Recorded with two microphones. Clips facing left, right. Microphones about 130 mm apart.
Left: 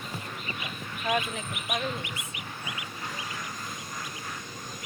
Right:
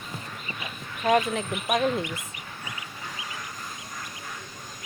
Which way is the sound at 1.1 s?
65° right (ahead or behind).